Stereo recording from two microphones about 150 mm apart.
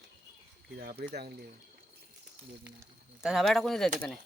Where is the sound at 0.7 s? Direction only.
90° right.